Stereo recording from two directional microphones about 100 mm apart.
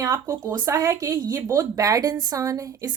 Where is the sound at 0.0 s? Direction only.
30° right (ahead or behind).